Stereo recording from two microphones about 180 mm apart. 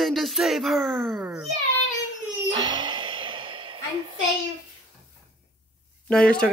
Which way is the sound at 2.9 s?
30° right (ahead or behind).